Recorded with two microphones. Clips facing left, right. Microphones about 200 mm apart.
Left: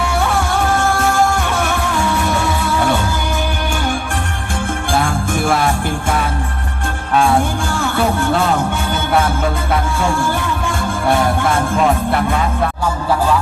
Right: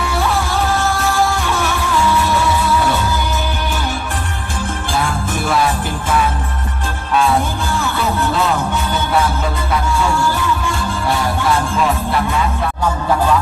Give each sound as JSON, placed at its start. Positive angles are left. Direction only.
{"t": 0.2, "sound": "music", "side_deg": 50}
{"t": 4.9, "sound": "music", "side_deg": 50}
{"t": 7.1, "sound": "music", "side_deg": 50}